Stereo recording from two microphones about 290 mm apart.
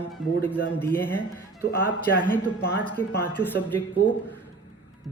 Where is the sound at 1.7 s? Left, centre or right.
Left.